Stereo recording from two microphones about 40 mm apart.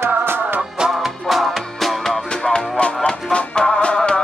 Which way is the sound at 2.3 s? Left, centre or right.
Centre.